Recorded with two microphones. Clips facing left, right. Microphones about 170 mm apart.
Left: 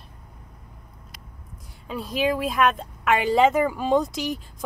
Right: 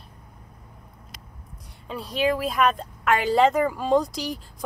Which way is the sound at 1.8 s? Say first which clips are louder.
Even; centre (ahead or behind).